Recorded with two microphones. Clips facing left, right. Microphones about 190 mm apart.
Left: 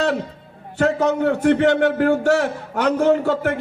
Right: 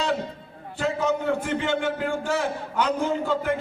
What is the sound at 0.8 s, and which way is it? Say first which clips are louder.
A man's voice: left 7 dB; 70° left (ahead or behind).